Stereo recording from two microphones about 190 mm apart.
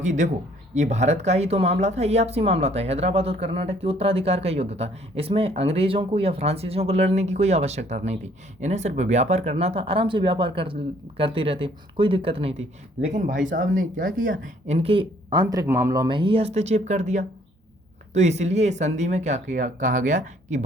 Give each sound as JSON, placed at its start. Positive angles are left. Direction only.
{"t": 0.0, "sound": "speech", "side_deg": -40}
{"t": 13.1, "sound": "speech", "side_deg": -40}